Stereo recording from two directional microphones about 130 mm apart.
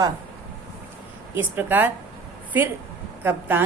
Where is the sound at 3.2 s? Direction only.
15° right (ahead or behind).